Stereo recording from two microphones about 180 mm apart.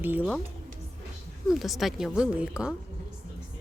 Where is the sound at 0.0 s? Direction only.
10° right (ahead or behind).